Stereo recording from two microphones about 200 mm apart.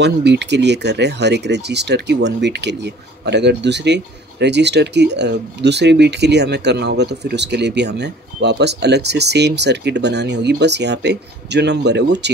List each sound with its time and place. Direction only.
0.0 s speech: 60° right (ahead or behind)